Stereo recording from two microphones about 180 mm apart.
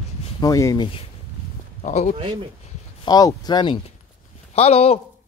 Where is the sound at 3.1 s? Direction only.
20° left (ahead or behind).